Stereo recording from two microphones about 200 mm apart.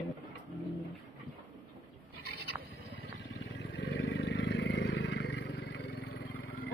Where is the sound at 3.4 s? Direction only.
60° left (ahead or behind).